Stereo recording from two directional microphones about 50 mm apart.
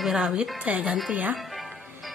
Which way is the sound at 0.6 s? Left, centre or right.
Right.